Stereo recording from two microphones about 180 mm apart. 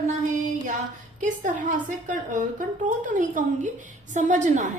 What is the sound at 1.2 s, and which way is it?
Speech, 45° right (ahead or behind).